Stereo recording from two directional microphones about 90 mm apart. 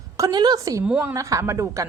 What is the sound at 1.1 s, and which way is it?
Speech, 35° right (ahead or behind).